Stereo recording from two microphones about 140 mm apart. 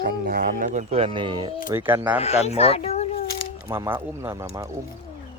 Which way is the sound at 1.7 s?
15° right (ahead or behind).